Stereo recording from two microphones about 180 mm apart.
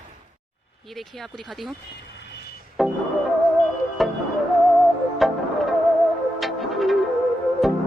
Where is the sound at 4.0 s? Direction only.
Centre (ahead or behind).